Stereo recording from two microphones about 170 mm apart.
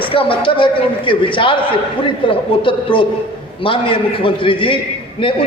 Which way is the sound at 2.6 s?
30° left (ahead or behind).